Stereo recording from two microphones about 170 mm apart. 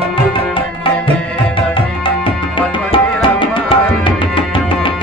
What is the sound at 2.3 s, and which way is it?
Music, 30° left (ahead or behind).